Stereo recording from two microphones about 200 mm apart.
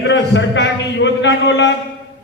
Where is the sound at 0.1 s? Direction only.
65° left (ahead or behind).